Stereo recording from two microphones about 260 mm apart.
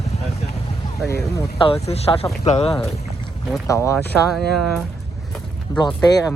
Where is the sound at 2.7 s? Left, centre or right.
Centre.